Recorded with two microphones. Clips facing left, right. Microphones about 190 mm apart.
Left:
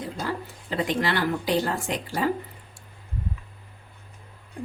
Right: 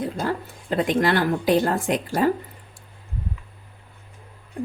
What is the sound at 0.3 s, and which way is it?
Speech, 50° right (ahead or behind).